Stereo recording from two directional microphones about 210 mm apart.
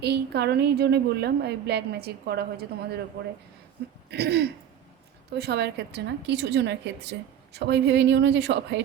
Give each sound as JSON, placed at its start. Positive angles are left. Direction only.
{"t": 0.0, "sound": "a woman's voice", "side_deg": -50}
{"t": 4.1, "sound": "a woman's voice", "side_deg": -50}